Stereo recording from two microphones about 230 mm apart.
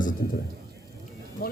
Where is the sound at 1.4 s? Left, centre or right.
Left.